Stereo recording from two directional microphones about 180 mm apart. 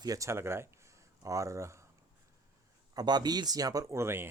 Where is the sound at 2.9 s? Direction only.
25° right (ahead or behind).